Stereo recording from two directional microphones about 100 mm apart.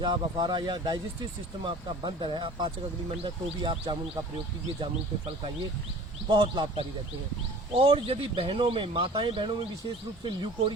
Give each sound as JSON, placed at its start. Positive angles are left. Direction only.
{"t": 0.0, "sound": "speech", "side_deg": -45}
{"t": 6.2, "sound": "speech", "side_deg": -50}
{"t": 7.7, "sound": "speech", "side_deg": -70}